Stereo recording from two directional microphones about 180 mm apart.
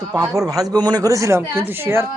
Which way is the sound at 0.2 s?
20° right (ahead or behind).